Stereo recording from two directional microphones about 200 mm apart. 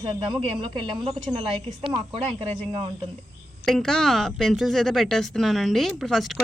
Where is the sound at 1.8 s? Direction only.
25° right (ahead or behind).